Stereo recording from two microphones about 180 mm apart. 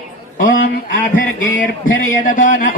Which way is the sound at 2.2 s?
45° left (ahead or behind).